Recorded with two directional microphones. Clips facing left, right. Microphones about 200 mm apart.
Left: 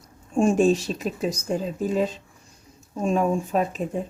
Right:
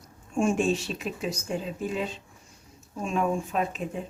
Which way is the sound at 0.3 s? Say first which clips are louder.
Left 6 dB; 35° left (ahead or behind).